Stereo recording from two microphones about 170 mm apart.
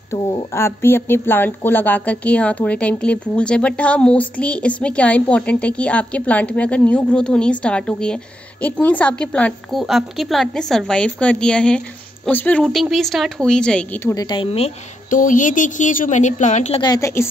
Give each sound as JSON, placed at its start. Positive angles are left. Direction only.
{"t": 0.1, "sound": "a woman's voice", "side_deg": 20}
{"t": 15.0, "sound": "a woman's voice", "side_deg": 50}
{"t": 16.8, "sound": "a woman's voice", "side_deg": 20}